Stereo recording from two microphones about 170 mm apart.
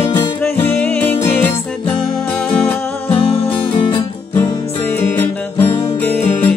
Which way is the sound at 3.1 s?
35° left (ahead or behind).